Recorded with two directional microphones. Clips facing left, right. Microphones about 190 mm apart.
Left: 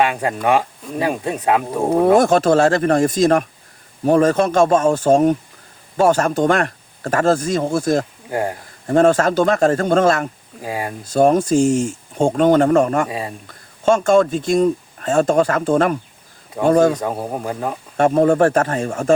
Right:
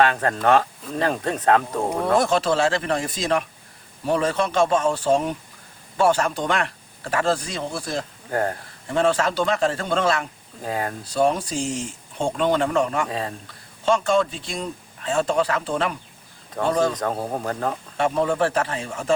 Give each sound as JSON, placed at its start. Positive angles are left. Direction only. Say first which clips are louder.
{"t": 0.0, "sound": "speech", "louder": "left 1 dB", "side_deg": 10}
{"t": 2.1, "sound": "speech", "louder": "left 3 dB", "side_deg": 45}
{"t": 8.3, "sound": "speech", "louder": "left 1 dB", "side_deg": 10}
{"t": 8.9, "sound": "speech", "louder": "left 7 dB", "side_deg": 45}
{"t": 10.6, "sound": "speech", "louder": "left 2 dB", "side_deg": 10}
{"t": 11.0, "sound": "speech", "louder": "left 8 dB", "side_deg": 45}
{"t": 13.1, "sound": "speech", "louder": "left 2 dB", "side_deg": 10}
{"t": 13.5, "sound": "speech", "louder": "left 6 dB", "side_deg": 45}
{"t": 16.9, "sound": "speech", "louder": "left 3 dB", "side_deg": 10}
{"t": 17.9, "sound": "speech", "louder": "left 9 dB", "side_deg": 50}